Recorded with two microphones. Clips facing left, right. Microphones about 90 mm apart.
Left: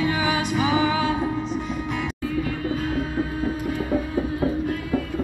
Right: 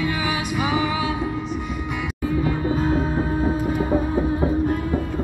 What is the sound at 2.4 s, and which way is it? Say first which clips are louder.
Heart murmur: right 5 dB; 25° right (ahead or behind).